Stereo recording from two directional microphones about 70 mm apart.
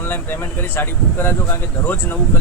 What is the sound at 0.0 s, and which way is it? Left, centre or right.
Speech, left.